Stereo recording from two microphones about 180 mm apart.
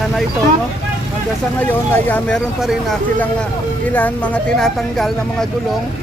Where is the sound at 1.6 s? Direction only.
10° left (ahead or behind).